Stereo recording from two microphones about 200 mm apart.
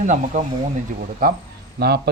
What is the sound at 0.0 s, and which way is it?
Speech, 35° right (ahead or behind).